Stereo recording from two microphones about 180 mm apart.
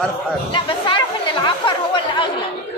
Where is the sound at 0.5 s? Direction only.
30° left (ahead or behind).